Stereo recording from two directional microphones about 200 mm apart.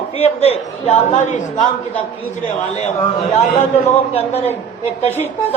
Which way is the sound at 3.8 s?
30° left (ahead or behind).